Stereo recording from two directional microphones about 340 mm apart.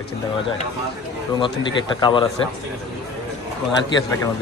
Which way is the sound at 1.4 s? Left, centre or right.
Centre.